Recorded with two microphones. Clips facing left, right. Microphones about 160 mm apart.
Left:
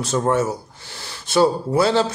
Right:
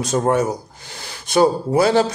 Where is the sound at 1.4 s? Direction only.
50° right (ahead or behind).